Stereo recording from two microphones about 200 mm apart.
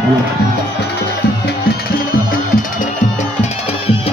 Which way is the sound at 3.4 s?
30° left (ahead or behind).